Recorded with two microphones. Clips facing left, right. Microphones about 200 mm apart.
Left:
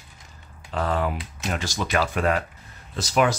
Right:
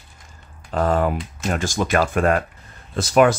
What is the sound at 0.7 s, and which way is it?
Speech, 45° right (ahead or behind).